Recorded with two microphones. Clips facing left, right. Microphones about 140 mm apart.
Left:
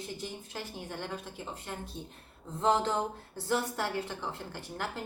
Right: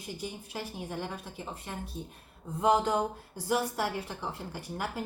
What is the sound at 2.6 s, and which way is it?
A woman's voice, 10° right (ahead or behind).